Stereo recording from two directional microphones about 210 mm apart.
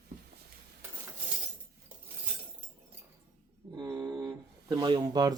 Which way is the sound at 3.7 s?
15° right (ahead or behind).